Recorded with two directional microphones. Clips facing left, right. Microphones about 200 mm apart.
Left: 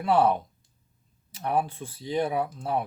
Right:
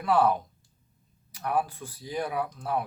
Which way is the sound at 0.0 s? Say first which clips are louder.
Left 1 dB; 25° left (ahead or behind).